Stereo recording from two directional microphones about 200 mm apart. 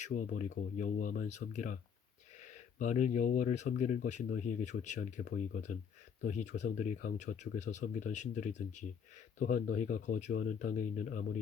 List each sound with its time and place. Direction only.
0.0 s speech: 40° left (ahead or behind)